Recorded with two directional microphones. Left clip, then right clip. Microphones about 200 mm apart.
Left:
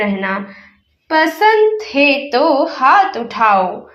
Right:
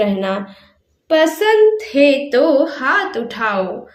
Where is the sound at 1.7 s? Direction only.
30° right (ahead or behind).